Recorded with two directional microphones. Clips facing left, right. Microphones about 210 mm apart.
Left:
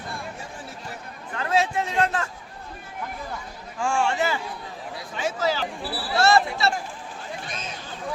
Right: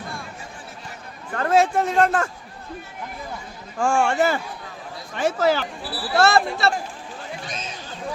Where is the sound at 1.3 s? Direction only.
45° right (ahead or behind).